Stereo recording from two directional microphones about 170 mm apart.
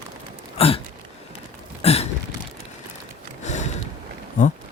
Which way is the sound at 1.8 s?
40° left (ahead or behind).